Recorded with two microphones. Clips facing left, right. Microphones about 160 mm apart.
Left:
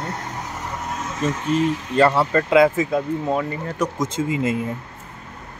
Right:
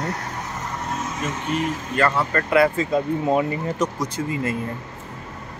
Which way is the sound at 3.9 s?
20° left (ahead or behind).